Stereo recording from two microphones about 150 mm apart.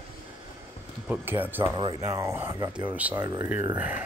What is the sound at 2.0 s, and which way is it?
Speech, 20° right (ahead or behind).